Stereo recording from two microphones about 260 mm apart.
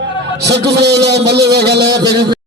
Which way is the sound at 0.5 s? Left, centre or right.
Right.